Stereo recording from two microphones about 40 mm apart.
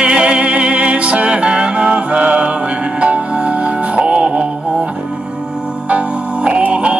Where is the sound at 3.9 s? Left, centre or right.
Right.